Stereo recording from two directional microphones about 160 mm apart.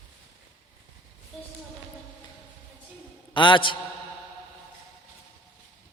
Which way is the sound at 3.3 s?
30° left (ahead or behind).